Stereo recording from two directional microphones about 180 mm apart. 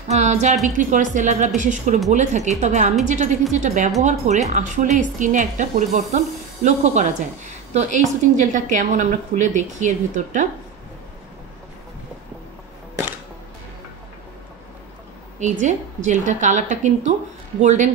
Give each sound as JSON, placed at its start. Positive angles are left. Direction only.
{"t": 0.1, "sound": "a woman's voice", "side_deg": -40}
{"t": 15.3, "sound": "a woman's voice", "side_deg": -40}